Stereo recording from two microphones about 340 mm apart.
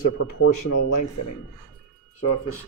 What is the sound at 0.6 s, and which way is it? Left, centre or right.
Speech, left.